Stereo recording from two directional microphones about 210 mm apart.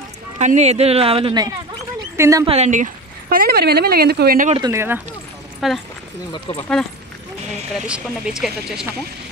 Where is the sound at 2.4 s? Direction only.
30° right (ahead or behind); by 4.5 s 45° right (ahead or behind).